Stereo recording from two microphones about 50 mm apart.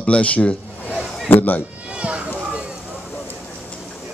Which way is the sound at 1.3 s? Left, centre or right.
Left.